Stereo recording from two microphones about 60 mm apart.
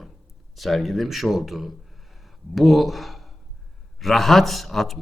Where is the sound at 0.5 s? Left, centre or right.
Centre.